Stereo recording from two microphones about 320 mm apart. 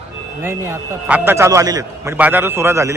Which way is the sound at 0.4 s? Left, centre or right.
Centre.